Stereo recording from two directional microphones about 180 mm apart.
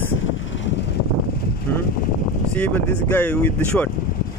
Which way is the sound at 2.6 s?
5° left (ahead or behind).